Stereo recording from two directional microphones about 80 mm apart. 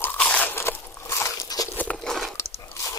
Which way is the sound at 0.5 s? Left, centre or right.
Left.